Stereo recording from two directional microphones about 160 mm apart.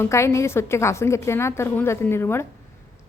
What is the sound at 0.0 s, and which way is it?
A woman's voice, 15° left (ahead or behind).